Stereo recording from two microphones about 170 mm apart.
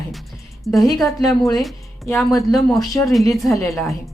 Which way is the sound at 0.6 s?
Centre (ahead or behind).